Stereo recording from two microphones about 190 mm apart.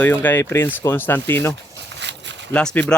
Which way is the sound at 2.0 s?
70° right (ahead or behind).